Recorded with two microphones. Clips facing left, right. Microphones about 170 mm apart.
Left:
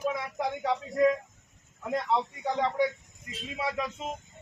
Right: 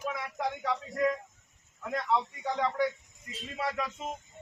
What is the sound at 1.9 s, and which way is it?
A man's voice, 25° left (ahead or behind).